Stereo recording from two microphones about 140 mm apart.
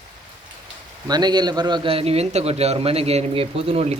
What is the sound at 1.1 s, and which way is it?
A man's voice, 30° right (ahead or behind).